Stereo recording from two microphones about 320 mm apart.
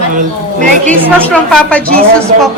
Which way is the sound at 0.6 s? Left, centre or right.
Centre.